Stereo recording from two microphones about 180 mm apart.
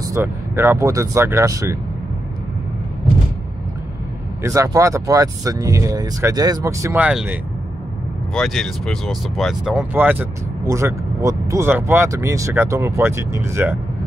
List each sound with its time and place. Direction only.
0.0 s speech: 15° right (ahead or behind)
4.4 s speech: 15° right (ahead or behind)
7.1 s speech: 5° right (ahead or behind)
8.4 s speech: centre (ahead or behind); by 13.7 s 15° right (ahead or behind)